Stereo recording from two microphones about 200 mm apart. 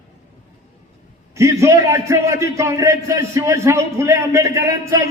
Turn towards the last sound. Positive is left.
turn(degrees=-15)  # may be behind; listen again after turning